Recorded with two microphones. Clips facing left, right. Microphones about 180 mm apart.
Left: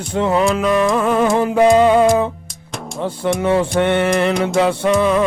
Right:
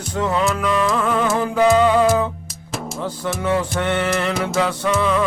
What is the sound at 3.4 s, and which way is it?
Music, 25° left (ahead or behind).